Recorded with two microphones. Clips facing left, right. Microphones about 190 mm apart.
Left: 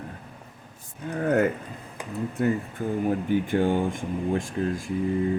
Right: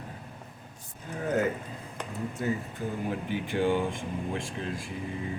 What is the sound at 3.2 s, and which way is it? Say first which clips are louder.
Speech: left 2 dB; 45° left (ahead or behind).